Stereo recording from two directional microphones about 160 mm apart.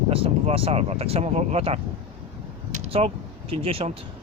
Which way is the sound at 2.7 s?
40° right (ahead or behind).